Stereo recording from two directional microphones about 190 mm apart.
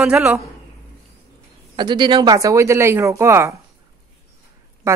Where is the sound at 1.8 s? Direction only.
25° right (ahead or behind).